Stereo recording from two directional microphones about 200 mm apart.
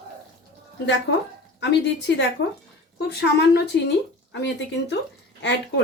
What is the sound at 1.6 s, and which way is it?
A woman's voice, 60° left (ahead or behind).